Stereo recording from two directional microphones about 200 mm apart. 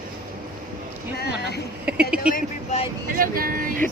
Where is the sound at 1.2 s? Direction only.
55° left (ahead or behind).